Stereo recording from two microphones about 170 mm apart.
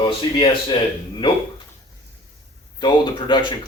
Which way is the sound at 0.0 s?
30° left (ahead or behind).